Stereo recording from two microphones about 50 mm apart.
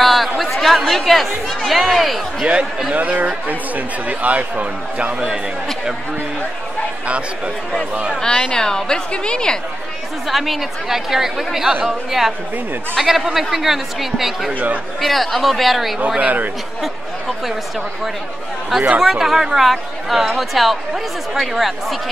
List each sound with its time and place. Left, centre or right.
0.0 s chatter: centre
0.4 s speech: centre
2.9 s speech: right
7.1 s speech: right
8.2 s a woman's voice: centre
10.2 s speech: centre
14.5 s a man's voice: right
15.0 s speech: centre
16.2 s a man's voice: right
18.9 s speech: centre